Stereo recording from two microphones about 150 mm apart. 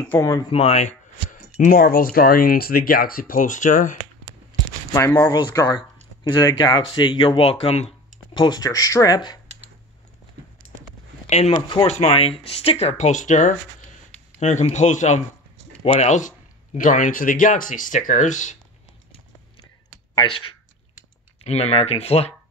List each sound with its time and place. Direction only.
0.0 s speech: 15° left (ahead or behind)
0.5 s speech: 45° left (ahead or behind)
1.6 s speech: 75° left (ahead or behind); by 4.0 s 60° left (ahead or behind)
4.9 s speech: 15° left (ahead or behind)
11.2 s speech: 45° left (ahead or behind)
11.5 s speech: 30° left (ahead or behind)
11.9 s speech: 45° left (ahead or behind)
20.2 s speech: 35° left (ahead or behind)